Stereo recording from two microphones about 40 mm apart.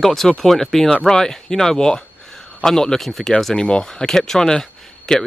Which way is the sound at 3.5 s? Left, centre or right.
Centre.